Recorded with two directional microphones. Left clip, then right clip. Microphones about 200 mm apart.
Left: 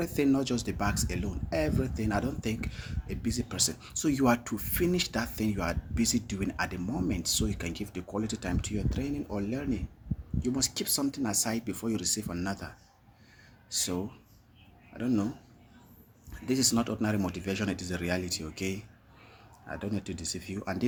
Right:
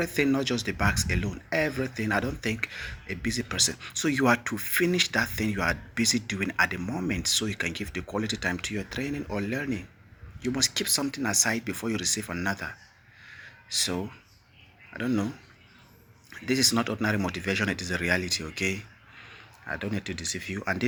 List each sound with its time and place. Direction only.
0.0 s speech: 5° right (ahead or behind)
16.3 s speech: 5° right (ahead or behind)